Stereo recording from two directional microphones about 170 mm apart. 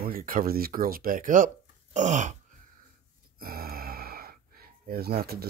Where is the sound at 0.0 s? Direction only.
55° right (ahead or behind).